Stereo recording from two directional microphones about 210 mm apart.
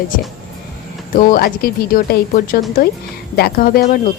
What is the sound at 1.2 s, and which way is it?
Speech, 45° left (ahead or behind).